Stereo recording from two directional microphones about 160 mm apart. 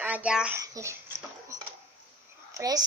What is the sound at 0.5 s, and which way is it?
Speech, 20° right (ahead or behind).